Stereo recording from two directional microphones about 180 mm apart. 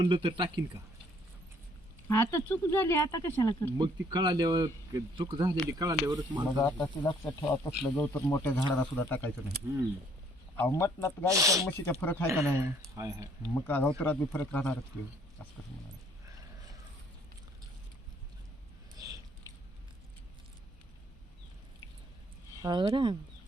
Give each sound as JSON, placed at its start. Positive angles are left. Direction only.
{"t": 0.0, "sound": "speech", "side_deg": -25}
{"t": 2.0, "sound": "speech", "side_deg": 15}
{"t": 3.8, "sound": "speech", "side_deg": -25}
{"t": 6.6, "sound": "speech", "side_deg": 15}
{"t": 10.6, "sound": "speech", "side_deg": 15}
{"t": 11.3, "sound": "speech", "side_deg": -15}
{"t": 11.9, "sound": "speech", "side_deg": 10}
{"t": 12.3, "sound": "speech", "side_deg": -15}
{"t": 13.4, "sound": "speech", "side_deg": 10}
{"t": 22.6, "sound": "speech", "side_deg": -25}